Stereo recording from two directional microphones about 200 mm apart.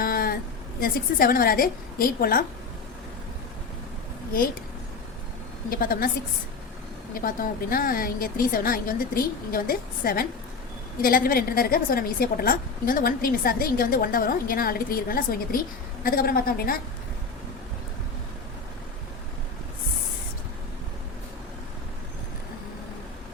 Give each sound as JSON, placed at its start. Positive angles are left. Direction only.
{"t": 0.0, "sound": "a sound", "side_deg": 45}
{"t": 0.8, "sound": "a woman's voice", "side_deg": 45}
{"t": 5.7, "sound": "a woman's voice", "side_deg": 45}
{"t": 7.1, "sound": "a woman's voice", "side_deg": 45}